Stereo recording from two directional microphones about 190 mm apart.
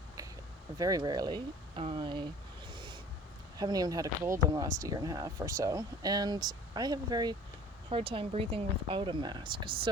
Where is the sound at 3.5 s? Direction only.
20° right (ahead or behind).